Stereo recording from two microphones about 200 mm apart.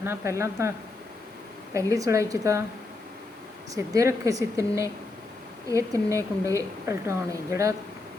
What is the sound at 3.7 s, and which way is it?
A woman's voice, 15° right (ahead or behind).